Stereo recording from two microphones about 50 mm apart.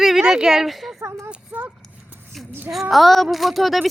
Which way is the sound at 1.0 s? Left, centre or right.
Right.